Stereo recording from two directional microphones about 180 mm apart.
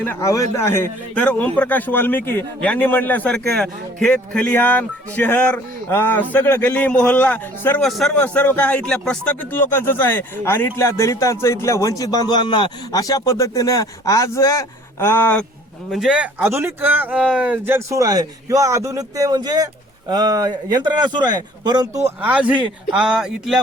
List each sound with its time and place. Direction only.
0.0 s speech: 15° left (ahead or behind)
15.9 s speech: 5° right (ahead or behind)